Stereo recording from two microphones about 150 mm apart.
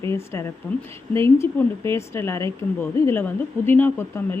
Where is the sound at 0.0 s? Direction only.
15° left (ahead or behind).